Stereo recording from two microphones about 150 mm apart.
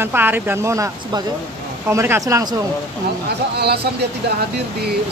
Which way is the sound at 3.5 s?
90° right.